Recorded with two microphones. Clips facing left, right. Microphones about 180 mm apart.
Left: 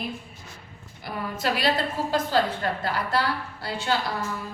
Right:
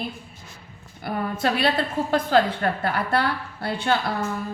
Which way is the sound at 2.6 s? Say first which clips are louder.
Right 3 dB; 55° right (ahead or behind).